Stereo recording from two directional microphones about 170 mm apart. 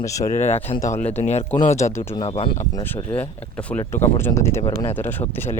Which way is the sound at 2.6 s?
15° left (ahead or behind).